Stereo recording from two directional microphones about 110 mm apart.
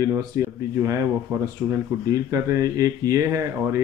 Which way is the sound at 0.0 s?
30° right (ahead or behind).